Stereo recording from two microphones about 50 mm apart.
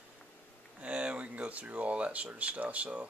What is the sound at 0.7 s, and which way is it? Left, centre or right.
Speech, right.